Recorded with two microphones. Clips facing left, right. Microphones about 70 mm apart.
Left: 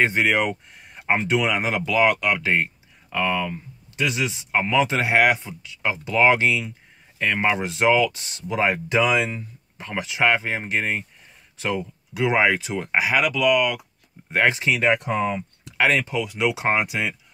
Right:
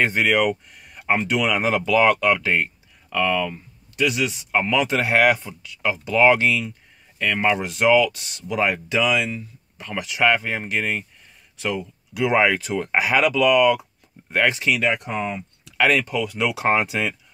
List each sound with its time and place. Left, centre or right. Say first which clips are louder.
0.0 s speech: right 1 dB; left
4.5 s speech: left 1 dB; centre
12.3 s speech: right 1 dB; centre
13.0 s speech: right 2 dB; centre
14.3 s speech: even; left
15.8 s speech: right 1 dB; left